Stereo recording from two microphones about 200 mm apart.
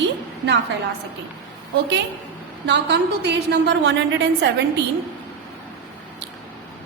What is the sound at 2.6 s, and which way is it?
A woman's voice, 60° right (ahead or behind).